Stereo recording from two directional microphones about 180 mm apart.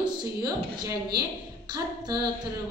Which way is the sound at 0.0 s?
20° right (ahead or behind).